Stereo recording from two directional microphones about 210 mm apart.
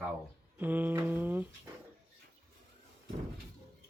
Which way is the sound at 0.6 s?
10° right (ahead or behind).